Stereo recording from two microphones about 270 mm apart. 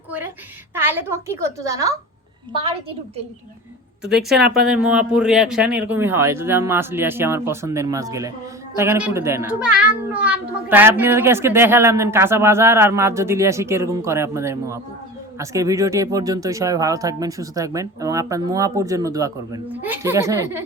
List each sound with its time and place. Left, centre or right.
0.7 s a child's voice: centre
4.1 s a child's voice: centre